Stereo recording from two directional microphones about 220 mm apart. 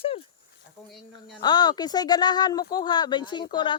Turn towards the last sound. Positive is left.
turn(degrees=20)  # may be behind; listen again after turning